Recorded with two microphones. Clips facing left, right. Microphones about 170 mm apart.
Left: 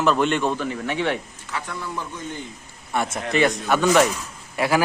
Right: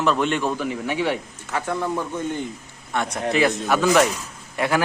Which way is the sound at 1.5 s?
50° right (ahead or behind).